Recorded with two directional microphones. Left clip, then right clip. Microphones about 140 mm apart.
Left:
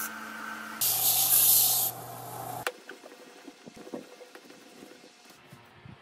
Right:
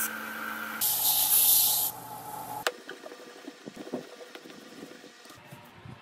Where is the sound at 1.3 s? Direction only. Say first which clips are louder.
Even; centre (ahead or behind).